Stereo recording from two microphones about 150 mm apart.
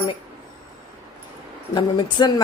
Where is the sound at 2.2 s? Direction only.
30° left (ahead or behind).